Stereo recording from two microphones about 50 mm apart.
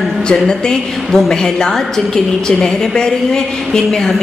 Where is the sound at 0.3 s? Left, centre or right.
Centre.